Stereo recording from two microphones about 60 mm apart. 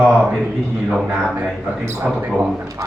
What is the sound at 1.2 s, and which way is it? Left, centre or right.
Speech, right.